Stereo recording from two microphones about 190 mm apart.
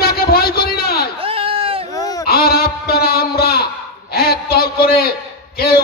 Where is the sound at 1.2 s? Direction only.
30° right (ahead or behind).